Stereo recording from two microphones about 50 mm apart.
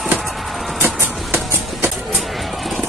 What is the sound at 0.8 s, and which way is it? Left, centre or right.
Vehicle, right.